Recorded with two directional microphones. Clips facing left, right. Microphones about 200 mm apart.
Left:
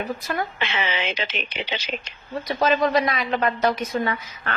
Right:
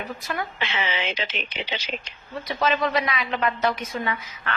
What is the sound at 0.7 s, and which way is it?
Speech, 60° left (ahead or behind).